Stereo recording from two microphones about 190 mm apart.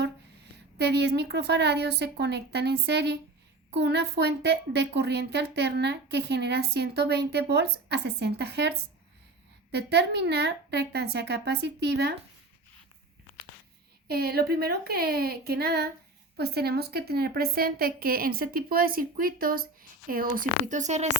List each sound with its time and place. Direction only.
0.5 s a woman's voice: 60° right (ahead or behind)
9.7 s a woman's voice: 60° right (ahead or behind)
14.1 s a woman's voice: 55° right (ahead or behind); by 21.2 s 40° right (ahead or behind)